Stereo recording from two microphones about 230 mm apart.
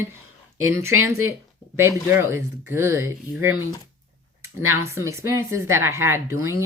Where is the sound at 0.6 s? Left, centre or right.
Centre.